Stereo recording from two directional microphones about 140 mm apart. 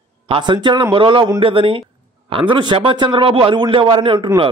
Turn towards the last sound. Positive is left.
turn(degrees=-35)  # may be behind; listen again after turning